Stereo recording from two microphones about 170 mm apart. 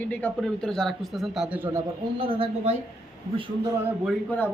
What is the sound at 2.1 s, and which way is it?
Speech, 35° right (ahead or behind).